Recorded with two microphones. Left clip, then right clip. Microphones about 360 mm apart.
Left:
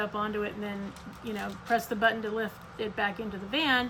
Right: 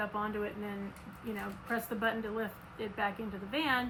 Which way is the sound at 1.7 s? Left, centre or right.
Left.